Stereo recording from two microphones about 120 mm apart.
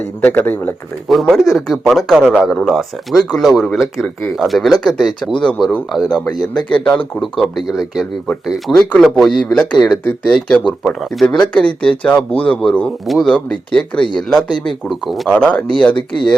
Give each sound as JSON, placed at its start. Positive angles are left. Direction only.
{"t": 0.3, "sound": "speech", "side_deg": 15}
{"t": 1.0, "sound": "speech", "side_deg": 0}
{"t": 15.3, "sound": "speech", "side_deg": 10}
{"t": 15.9, "sound": "speech", "side_deg": 40}